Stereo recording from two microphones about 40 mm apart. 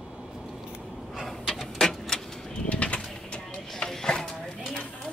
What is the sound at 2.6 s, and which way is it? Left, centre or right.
Bird, left.